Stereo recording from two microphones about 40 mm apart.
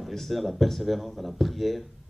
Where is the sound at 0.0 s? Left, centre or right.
Centre.